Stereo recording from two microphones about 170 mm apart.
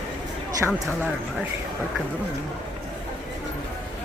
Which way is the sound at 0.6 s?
Centre (ahead or behind).